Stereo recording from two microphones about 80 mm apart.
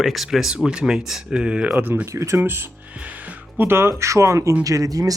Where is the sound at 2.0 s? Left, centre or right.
Right.